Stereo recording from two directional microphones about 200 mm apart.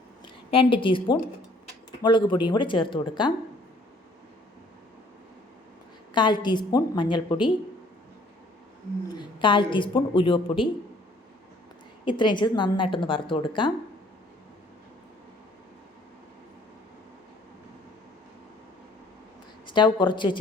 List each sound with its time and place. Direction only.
0.5 s a woman's voice: 25° left (ahead or behind)
6.1 s a woman's voice: 20° left (ahead or behind)
9.1 s a woman's voice: 25° left (ahead or behind)
12.0 s a woman's voice: 25° left (ahead or behind)
19.6 s speech: 25° left (ahead or behind)